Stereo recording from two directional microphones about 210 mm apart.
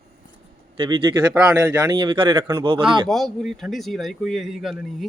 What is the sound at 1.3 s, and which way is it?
Speech, 10° right (ahead or behind).